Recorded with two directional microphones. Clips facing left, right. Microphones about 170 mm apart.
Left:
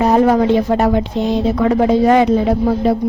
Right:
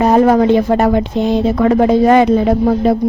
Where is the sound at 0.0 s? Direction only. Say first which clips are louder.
Right 2 dB; 50° right (ahead or behind).